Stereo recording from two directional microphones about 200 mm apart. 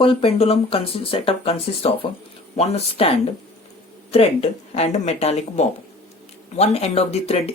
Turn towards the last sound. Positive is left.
turn(degrees=30)  # may be behind; listen again after turning